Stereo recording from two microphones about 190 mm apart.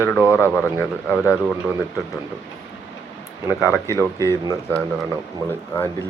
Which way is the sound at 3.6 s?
15° left (ahead or behind).